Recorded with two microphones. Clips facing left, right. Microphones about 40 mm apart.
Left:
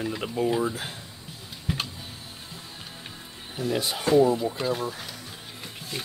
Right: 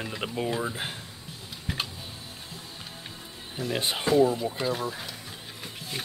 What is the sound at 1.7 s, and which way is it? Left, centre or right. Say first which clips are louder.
Music: left 2 dB; centre.